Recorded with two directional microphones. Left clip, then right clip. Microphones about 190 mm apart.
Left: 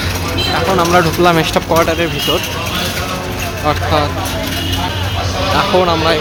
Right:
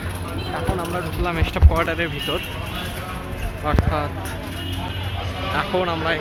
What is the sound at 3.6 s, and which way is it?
Speech, 10° left (ahead or behind).